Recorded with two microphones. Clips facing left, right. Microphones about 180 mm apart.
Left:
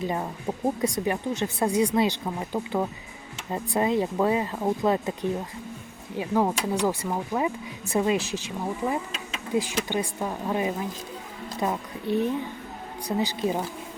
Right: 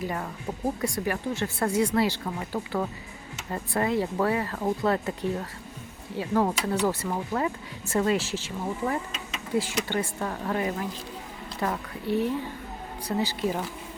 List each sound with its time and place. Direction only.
0.1 s a woman's voice: 20° left (ahead or behind)